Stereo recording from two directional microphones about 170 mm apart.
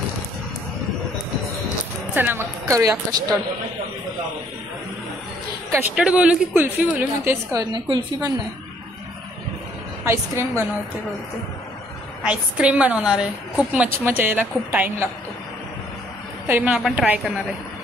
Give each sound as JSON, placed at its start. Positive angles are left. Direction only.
{"t": 2.1, "sound": "a woman's voice", "side_deg": -10}
{"t": 5.7, "sound": "a woman's voice", "side_deg": -10}
{"t": 7.5, "sound": "a woman's voice", "side_deg": -25}
{"t": 10.0, "sound": "a woman's voice", "side_deg": -15}
{"t": 12.2, "sound": "a woman's voice", "side_deg": -5}
{"t": 16.4, "sound": "a woman's voice", "side_deg": -10}